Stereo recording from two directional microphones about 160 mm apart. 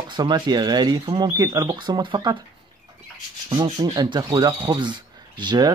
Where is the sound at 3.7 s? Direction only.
25° right (ahead or behind).